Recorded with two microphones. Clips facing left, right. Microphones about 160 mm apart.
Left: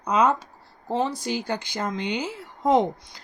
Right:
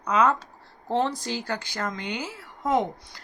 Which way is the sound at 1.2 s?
15° left (ahead or behind).